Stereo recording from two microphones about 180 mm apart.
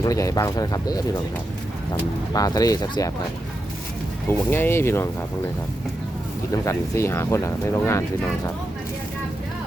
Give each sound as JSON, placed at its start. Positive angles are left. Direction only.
{"t": 0.0, "sound": "speech", "side_deg": 20}
{"t": 4.3, "sound": "speech", "side_deg": 10}
{"t": 6.7, "sound": "speech", "side_deg": 15}